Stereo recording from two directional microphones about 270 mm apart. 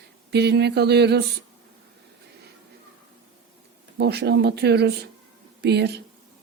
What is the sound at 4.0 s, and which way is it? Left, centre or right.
Speech, right.